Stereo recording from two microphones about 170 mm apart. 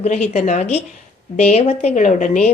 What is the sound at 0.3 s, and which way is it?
A woman's voice, 40° left (ahead or behind).